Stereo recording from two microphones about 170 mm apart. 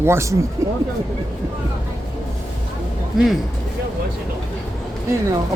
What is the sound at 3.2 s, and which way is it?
Speech, centre (ahead or behind).